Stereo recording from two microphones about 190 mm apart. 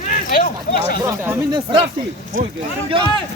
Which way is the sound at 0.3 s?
50° left (ahead or behind).